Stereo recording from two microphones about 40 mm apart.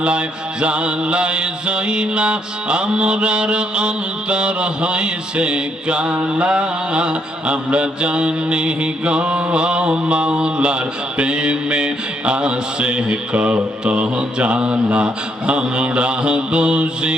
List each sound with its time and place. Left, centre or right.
0.0 s mantra: right